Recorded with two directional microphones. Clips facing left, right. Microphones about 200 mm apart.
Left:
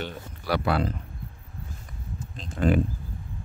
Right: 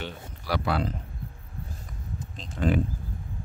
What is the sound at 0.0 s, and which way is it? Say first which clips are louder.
Speech: left 3 dB; 55° left (ahead or behind).